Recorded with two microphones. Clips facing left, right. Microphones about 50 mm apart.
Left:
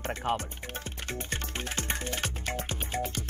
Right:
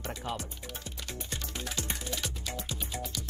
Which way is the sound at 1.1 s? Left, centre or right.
Left.